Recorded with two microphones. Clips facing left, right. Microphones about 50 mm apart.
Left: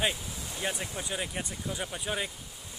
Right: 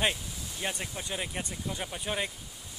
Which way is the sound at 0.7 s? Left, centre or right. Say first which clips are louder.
Left 1 dB; centre.